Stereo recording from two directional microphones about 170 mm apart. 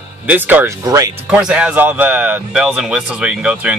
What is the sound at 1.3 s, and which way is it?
Speech, 5° right (ahead or behind).